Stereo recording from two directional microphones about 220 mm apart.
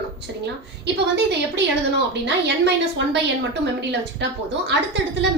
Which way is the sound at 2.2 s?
55° right (ahead or behind).